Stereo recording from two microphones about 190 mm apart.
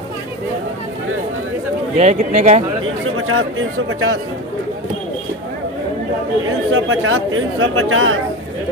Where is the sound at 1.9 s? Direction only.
35° right (ahead or behind).